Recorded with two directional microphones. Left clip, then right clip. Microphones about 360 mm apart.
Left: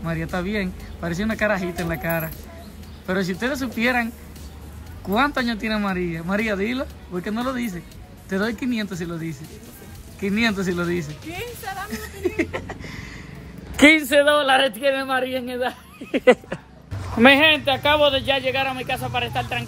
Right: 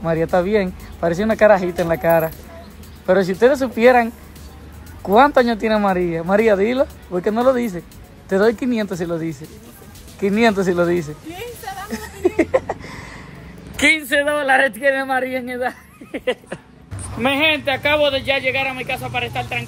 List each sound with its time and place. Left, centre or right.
0.0 s speech: centre
10.2 s music: centre
13.7 s speech: centre
16.1 s a sound: left
17.4 s speech: centre